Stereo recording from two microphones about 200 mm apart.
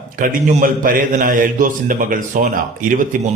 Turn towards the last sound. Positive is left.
turn(degrees=-40)  # may be behind; listen again after turning